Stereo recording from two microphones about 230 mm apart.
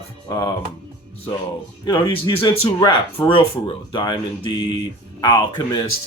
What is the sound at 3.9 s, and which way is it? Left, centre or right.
Speech, centre.